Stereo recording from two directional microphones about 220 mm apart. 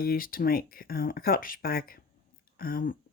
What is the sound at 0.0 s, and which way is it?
Speech, 40° left (ahead or behind).